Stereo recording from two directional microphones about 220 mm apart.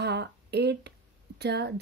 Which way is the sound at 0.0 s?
50° right (ahead or behind).